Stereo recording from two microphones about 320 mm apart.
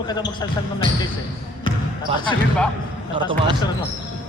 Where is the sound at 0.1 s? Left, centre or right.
Centre.